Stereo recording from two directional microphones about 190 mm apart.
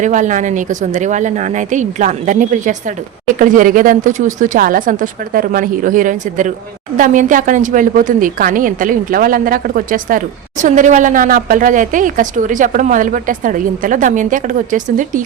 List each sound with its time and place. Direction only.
0.0 s a woman's voice: 40° right (ahead or behind)